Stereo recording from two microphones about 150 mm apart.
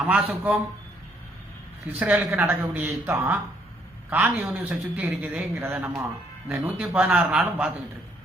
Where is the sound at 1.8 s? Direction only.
10° right (ahead or behind).